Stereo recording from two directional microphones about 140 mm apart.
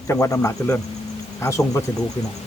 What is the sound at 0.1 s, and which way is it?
A man's voice, 20° left (ahead or behind).